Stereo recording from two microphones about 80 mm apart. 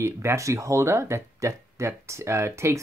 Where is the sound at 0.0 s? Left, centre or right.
Right.